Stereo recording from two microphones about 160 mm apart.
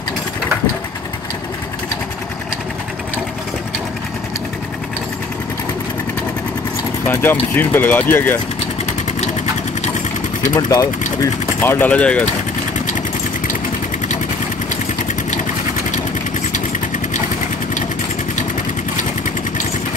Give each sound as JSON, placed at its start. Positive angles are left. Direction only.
{"t": 7.1, "sound": "speech", "side_deg": 15}
{"t": 10.5, "sound": "speech", "side_deg": 20}